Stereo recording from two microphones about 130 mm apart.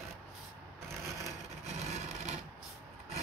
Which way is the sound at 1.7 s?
60° right (ahead or behind).